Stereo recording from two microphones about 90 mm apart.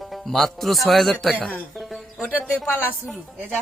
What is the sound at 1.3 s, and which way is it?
Speech, 15° left (ahead or behind).